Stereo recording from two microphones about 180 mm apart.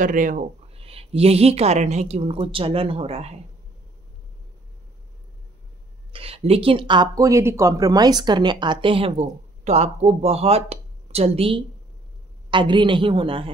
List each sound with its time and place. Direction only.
0.0 s speech: 50° right (ahead or behind)
0.7 s speech: 35° right (ahead or behind)
6.1 s a woman's voice: 35° right (ahead or behind)